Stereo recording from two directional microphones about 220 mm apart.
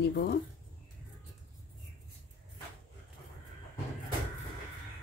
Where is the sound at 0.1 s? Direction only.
45° left (ahead or behind).